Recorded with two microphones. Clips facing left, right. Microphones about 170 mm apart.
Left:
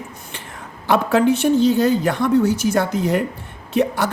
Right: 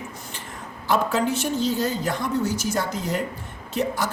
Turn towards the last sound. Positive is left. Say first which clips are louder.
# left 6 dB
turn(degrees=60)  # may be behind; listen again after turning